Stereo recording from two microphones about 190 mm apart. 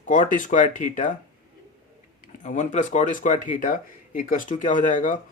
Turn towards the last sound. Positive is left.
turn(degrees=40)  # may be behind; listen again after turning